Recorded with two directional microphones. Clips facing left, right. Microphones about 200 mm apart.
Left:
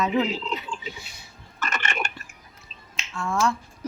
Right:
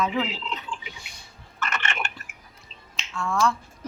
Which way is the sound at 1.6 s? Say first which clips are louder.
Left 1 dB; 40° left (ahead or behind).